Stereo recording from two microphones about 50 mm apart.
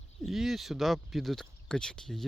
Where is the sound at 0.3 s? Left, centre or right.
Centre.